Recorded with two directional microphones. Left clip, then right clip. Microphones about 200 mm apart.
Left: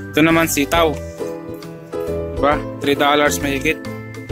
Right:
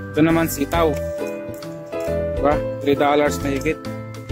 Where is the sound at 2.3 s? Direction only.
Centre (ahead or behind).